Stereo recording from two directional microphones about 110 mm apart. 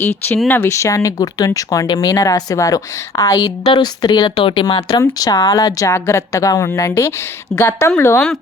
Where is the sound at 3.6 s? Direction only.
45° left (ahead or behind).